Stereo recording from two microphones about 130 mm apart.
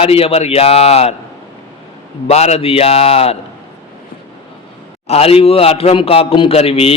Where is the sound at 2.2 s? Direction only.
55° left (ahead or behind).